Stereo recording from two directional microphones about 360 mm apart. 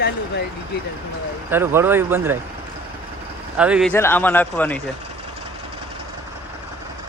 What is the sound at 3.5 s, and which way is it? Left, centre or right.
Speech, centre.